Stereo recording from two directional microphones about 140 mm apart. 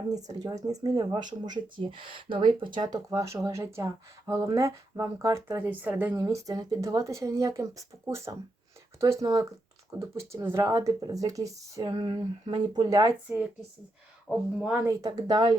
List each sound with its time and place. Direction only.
0.1 s speech: 25° right (ahead or behind)
6.2 s speech: 25° right (ahead or behind)
13.2 s speech: 10° right (ahead or behind)
14.8 s speech: 20° right (ahead or behind)